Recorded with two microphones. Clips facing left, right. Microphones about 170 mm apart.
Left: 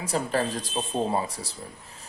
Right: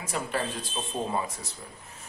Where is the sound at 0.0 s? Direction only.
35° left (ahead or behind).